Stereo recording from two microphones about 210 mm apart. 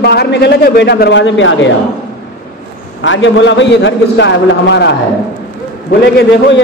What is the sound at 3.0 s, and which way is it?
A man's voice, 65° left (ahead or behind).